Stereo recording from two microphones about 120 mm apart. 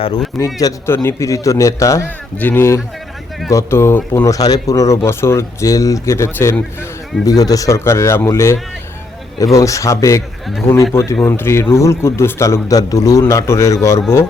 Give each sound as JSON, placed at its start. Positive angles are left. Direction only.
{"t": 0.3, "sound": "speech", "side_deg": 25}
{"t": 2.0, "sound": "speech", "side_deg": 15}
{"t": 10.4, "sound": "a man's voice", "side_deg": 0}
{"t": 10.9, "sound": "speech", "side_deg": 20}